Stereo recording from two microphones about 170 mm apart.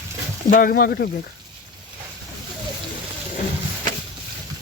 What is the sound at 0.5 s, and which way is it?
Speech, 60° left (ahead or behind).